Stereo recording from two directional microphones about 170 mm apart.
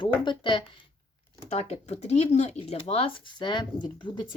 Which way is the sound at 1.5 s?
40° left (ahead or behind).